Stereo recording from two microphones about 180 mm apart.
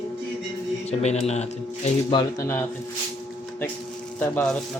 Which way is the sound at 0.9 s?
35° left (ahead or behind).